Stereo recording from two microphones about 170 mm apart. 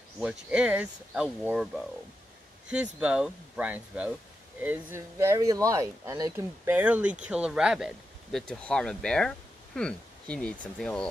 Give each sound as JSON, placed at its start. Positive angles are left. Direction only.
{"t": 0.2, "sound": "speech", "side_deg": -5}